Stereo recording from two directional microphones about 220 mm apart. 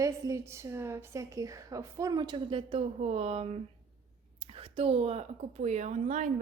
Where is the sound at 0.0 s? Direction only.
15° right (ahead or behind).